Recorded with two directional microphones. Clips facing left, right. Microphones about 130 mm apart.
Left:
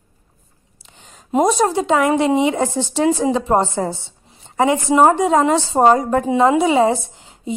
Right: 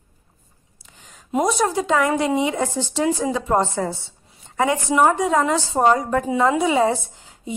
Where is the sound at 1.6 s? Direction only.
25° left (ahead or behind).